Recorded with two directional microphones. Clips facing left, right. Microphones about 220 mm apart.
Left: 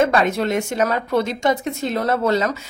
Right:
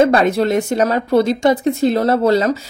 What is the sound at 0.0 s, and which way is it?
Speech, 35° right (ahead or behind).